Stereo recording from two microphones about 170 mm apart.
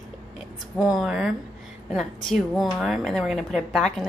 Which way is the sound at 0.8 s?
Centre (ahead or behind).